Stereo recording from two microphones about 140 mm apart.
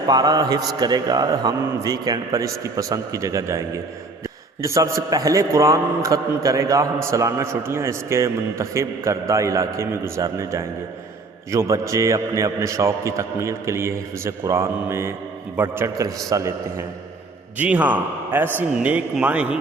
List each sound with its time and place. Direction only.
0.1 s a man's voice: 30° right (ahead or behind)
17.6 s a man's voice: 10° right (ahead or behind)